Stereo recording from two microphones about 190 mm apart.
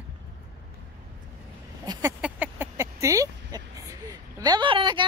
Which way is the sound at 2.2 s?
10° right (ahead or behind).